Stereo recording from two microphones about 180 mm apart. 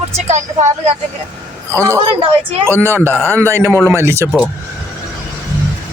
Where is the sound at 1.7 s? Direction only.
15° right (ahead or behind).